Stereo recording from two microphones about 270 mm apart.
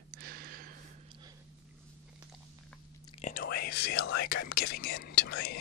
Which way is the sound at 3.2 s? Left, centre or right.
Left.